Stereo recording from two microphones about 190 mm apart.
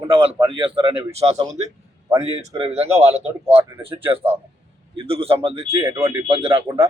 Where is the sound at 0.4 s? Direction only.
25° right (ahead or behind).